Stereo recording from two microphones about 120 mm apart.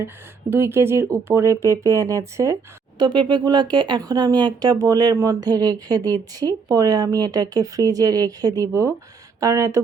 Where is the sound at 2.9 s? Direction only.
40° right (ahead or behind).